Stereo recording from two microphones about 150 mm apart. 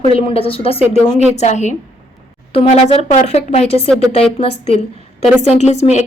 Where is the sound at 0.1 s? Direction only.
40° left (ahead or behind).